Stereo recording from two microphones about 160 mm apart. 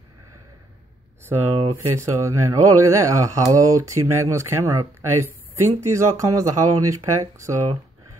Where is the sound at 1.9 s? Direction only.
20° right (ahead or behind).